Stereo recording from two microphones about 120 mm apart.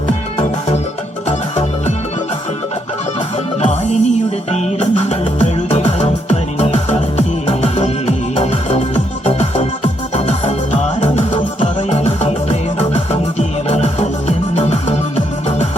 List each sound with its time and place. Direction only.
3.6 s music: 70° left (ahead or behind)